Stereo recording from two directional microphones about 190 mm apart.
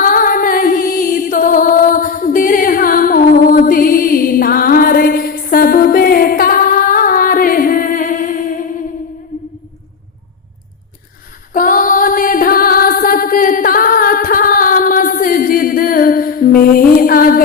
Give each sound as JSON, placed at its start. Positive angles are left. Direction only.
{"t": 0.0, "sound": "music", "side_deg": 45}
{"t": 11.5, "sound": "music", "side_deg": 45}